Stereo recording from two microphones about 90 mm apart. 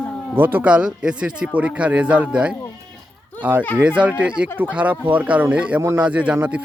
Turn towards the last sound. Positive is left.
turn(degrees=-15)  # may be behind; listen again after turning